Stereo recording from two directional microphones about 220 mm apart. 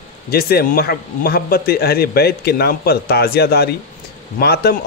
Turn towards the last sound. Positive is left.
turn(degrees=45)  # may be behind; listen again after turning